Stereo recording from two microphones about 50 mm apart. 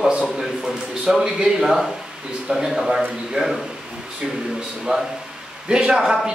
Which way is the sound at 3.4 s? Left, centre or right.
Right.